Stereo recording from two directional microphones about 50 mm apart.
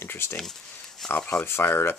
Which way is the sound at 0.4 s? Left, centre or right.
Centre.